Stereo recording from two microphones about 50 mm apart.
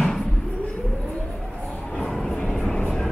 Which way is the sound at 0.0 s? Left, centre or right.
Centre.